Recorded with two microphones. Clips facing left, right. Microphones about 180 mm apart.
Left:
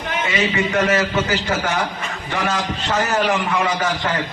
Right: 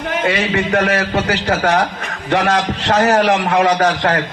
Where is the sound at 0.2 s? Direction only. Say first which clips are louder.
Right 3 dB; 60° right (ahead or behind).